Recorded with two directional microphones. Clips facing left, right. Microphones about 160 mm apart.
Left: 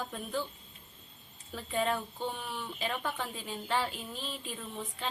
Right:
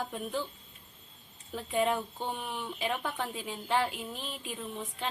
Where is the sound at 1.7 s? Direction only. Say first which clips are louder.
Right 2 dB; 10° right (ahead or behind).